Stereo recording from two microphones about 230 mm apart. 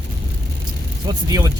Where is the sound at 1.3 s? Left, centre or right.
Centre.